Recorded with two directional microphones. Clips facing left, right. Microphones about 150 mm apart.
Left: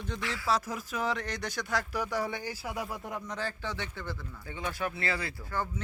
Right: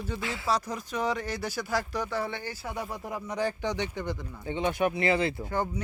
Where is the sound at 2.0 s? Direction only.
10° left (ahead or behind).